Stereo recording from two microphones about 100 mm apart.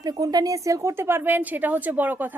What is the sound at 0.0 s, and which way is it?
A woman's voice, 40° right (ahead or behind).